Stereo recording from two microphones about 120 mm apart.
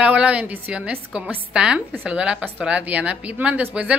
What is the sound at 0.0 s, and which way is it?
A woman's voice, 10° right (ahead or behind).